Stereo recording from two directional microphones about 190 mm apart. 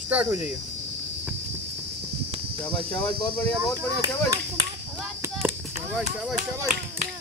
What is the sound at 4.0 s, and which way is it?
Speech, 20° right (ahead or behind).